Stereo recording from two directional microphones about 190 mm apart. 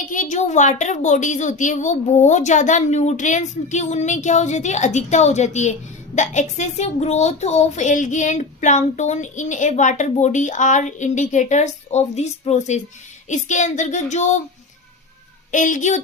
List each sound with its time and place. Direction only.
0.1 s a woman's voice: 40° left (ahead or behind)
15.5 s a woman's voice: 40° left (ahead or behind)